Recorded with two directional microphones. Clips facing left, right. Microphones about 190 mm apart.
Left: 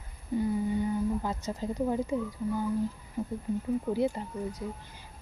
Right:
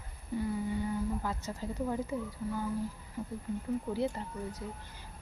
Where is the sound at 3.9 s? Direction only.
15° left (ahead or behind).